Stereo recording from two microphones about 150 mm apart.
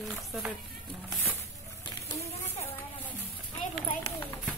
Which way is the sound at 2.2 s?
15° left (ahead or behind).